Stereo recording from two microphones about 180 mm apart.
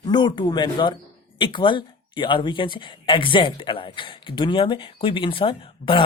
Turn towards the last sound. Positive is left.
turn(degrees=30)  # may be behind; listen again after turning